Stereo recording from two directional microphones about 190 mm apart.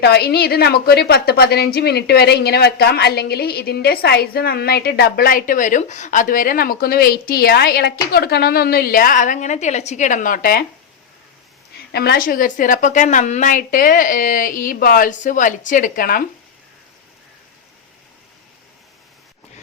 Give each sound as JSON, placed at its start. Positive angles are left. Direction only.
{"t": 0.0, "sound": "a woman's voice", "side_deg": 55}
{"t": 11.9, "sound": "a woman's voice", "side_deg": 55}